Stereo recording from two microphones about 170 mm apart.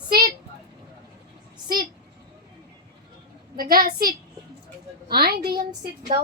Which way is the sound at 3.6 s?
60° right (ahead or behind).